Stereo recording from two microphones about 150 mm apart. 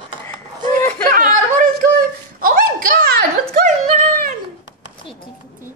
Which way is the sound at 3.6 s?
50° right (ahead or behind).